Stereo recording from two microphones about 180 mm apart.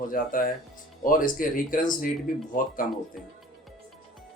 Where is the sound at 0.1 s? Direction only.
50° left (ahead or behind).